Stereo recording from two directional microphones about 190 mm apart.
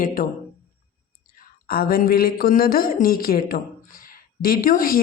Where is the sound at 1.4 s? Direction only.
50° left (ahead or behind).